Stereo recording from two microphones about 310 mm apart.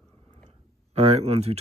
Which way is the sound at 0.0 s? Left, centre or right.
Centre.